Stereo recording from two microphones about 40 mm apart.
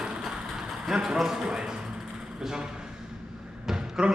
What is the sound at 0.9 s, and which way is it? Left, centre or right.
Speech, centre.